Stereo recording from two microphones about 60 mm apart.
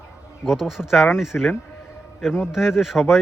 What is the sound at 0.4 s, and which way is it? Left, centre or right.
A man's voice, centre.